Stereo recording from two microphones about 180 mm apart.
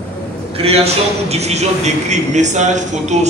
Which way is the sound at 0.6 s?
35° right (ahead or behind).